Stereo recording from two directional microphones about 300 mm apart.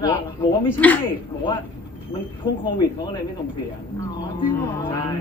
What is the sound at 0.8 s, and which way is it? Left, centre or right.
Speech, centre.